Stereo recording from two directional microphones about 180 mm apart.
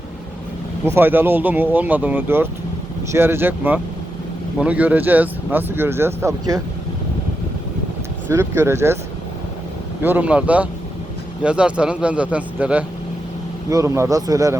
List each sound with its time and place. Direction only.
0.9 s speech: 10° right (ahead or behind)
8.3 s speech: 15° right (ahead or behind)
10.0 s speech: 10° right (ahead or behind)